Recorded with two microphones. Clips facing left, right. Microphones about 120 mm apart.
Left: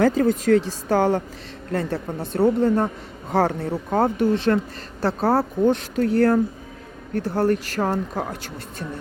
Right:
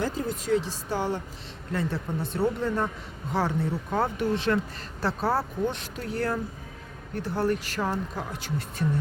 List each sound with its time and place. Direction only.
0.0 s speech: 65° left (ahead or behind); by 2.4 s 50° left (ahead or behind)
2.4 s speech: 40° left (ahead or behind)
3.8 s speech: 35° left (ahead or behind)